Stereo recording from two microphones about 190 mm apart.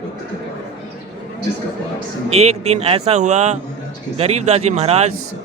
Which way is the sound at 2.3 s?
35° right (ahead or behind).